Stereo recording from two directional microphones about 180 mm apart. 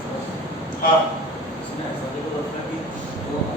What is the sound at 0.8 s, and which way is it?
Speech, 55° left (ahead or behind).